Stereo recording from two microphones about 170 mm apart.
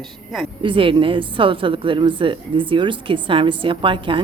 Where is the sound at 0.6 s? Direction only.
30° right (ahead or behind).